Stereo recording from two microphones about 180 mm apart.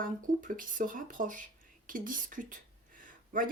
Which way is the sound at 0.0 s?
50° right (ahead or behind).